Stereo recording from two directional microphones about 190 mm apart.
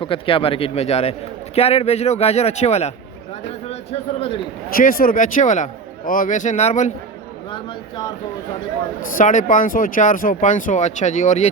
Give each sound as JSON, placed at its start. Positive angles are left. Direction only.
{"t": 0.0, "sound": "a man's voice", "side_deg": 30}
{"t": 4.7, "sound": "speech", "side_deg": 50}
{"t": 7.5, "sound": "a man's voice", "side_deg": 20}
{"t": 9.1, "sound": "speech", "side_deg": 40}